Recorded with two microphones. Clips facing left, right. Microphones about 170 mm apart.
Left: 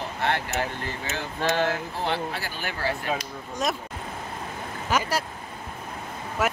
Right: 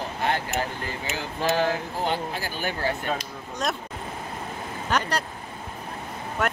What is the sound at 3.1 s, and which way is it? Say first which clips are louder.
Speech: even; 5° left (ahead or behind).